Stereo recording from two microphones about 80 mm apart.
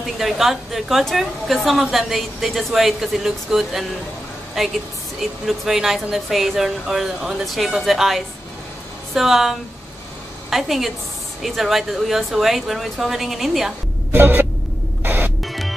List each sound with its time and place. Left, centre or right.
0.0 s a woman's voice: centre
14.1 s a sound: right
15.0 s music: right
15.4 s music: centre